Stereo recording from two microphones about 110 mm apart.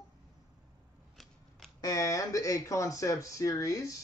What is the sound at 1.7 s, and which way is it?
Speech, 35° left (ahead or behind).